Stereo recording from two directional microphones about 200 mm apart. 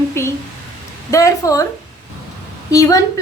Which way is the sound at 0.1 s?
15° left (ahead or behind).